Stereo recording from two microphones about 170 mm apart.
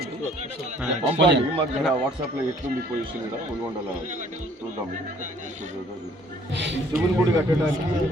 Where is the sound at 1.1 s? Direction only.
90° right.